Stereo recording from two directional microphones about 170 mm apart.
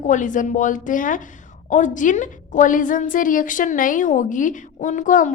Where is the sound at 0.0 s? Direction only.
45° left (ahead or behind).